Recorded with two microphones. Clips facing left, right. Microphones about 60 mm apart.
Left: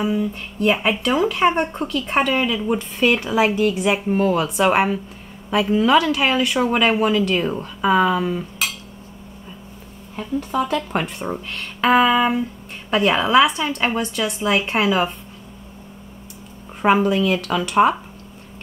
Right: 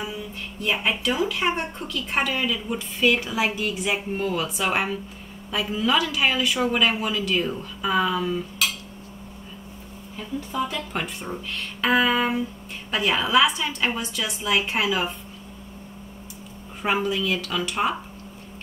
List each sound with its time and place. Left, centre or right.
0.0 s speech: left
10.7 s speech: left
16.8 s speech: left